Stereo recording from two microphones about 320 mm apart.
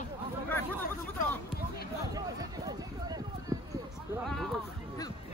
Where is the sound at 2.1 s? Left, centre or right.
Centre.